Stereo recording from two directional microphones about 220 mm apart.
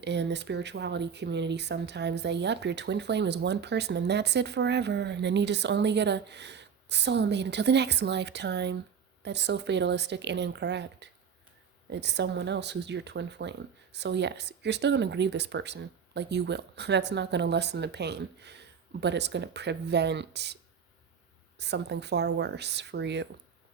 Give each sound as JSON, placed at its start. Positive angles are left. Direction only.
{"t": 0.0, "sound": "speech", "side_deg": -50}
{"t": 21.6, "sound": "speech", "side_deg": -50}